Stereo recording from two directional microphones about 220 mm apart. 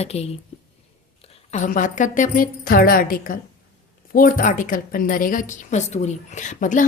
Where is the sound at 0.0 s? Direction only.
30° left (ahead or behind).